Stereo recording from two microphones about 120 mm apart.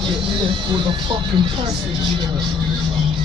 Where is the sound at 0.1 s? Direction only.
45° right (ahead or behind).